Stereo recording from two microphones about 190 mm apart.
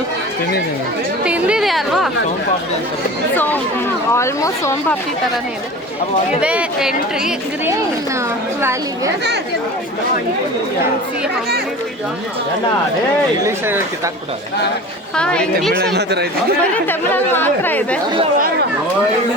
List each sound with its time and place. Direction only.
1.2 s a woman's voice: 5° right (ahead or behind)
3.3 s speech: 10° left (ahead or behind)
6.4 s a woman's voice: 5° right (ahead or behind)
13.4 s speech: 15° right (ahead or behind)
15.1 s a woman's voice: 5° left (ahead or behind)
16.0 s speech: 60° right (ahead or behind)
16.7 s speech: 10° left (ahead or behind)